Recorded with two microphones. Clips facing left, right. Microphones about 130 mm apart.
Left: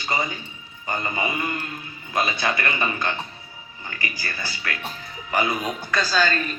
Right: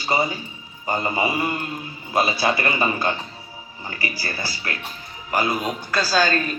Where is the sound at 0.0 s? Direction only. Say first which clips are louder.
Right 4 dB; 30° right (ahead or behind).